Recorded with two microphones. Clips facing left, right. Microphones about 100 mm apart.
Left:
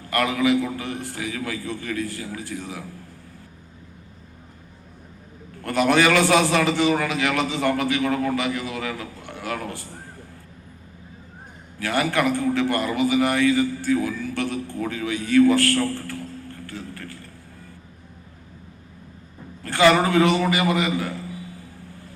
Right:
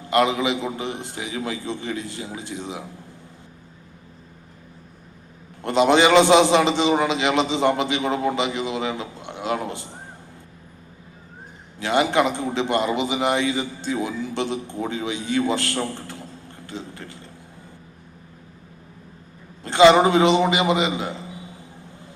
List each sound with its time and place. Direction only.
0.0 s a man's voice: 20° right (ahead or behind)
5.6 s a man's voice: 20° right (ahead or behind)
11.8 s a man's voice: 20° right (ahead or behind)
19.6 s a man's voice: 20° right (ahead or behind)